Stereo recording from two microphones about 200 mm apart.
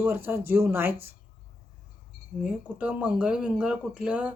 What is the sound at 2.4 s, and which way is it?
Speech, 5° right (ahead or behind).